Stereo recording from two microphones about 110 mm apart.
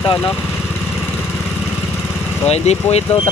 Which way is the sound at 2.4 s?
75° left (ahead or behind).